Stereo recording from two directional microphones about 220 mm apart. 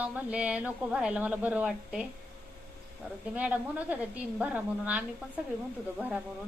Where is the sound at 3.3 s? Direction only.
5° right (ahead or behind).